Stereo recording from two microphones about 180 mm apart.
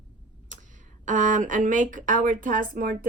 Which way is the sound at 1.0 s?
45° right (ahead or behind).